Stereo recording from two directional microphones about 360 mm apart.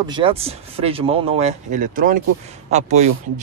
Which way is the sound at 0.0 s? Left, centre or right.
Centre.